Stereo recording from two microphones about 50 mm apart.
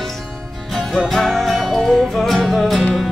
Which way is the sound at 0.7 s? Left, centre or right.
Centre.